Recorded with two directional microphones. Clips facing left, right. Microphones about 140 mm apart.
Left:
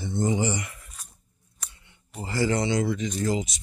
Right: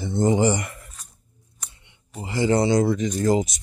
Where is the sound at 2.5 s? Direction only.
35° right (ahead or behind).